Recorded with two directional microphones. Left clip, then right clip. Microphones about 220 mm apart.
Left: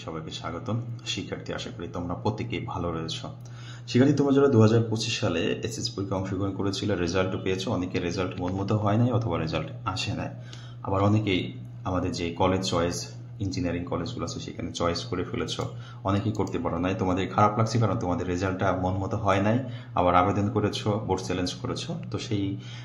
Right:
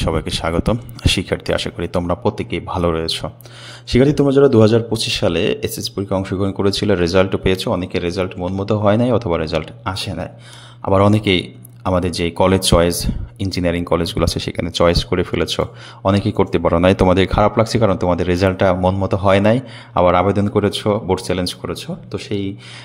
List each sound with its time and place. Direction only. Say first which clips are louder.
0.0 s a man's voice: right 15 dB; 50° right (ahead or behind)